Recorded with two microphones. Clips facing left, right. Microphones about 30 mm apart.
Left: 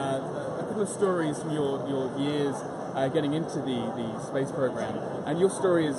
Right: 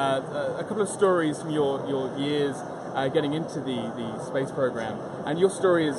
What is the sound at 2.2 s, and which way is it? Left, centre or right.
Speech, right.